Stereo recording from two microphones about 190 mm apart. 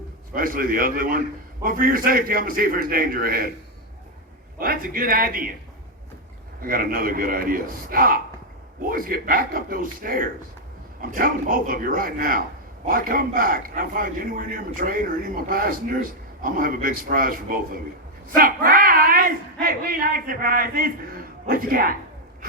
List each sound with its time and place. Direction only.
0.3 s a man's voice: 50° right (ahead or behind)
4.6 s a man's voice: 50° right (ahead or behind)
6.6 s a man's voice: 50° right (ahead or behind)